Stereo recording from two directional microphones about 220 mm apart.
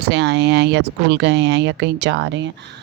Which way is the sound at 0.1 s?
50° right (ahead or behind).